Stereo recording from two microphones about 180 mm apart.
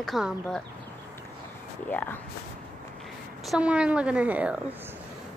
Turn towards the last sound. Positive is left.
turn(degrees=-10)  # may be behind; listen again after turning